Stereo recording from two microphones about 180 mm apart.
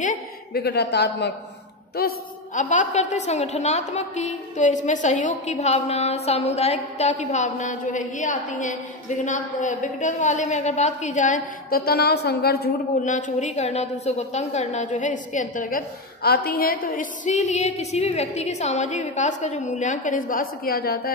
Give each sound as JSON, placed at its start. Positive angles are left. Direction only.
{"t": 0.5, "sound": "a man's voice", "side_deg": 65}
{"t": 2.0, "sound": "a woman's voice", "side_deg": 55}
{"t": 2.6, "sound": "a woman's voice", "side_deg": 40}